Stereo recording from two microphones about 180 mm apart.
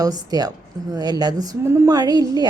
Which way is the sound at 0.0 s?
20° right (ahead or behind).